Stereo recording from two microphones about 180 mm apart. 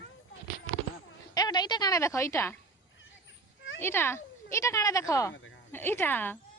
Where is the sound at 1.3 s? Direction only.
20° left (ahead or behind).